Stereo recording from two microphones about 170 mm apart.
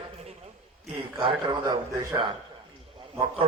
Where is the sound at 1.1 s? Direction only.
25° right (ahead or behind).